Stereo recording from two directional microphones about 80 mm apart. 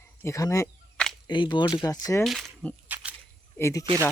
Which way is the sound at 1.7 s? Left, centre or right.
Left.